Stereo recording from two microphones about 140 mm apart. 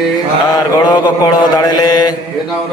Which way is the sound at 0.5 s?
30° left (ahead or behind).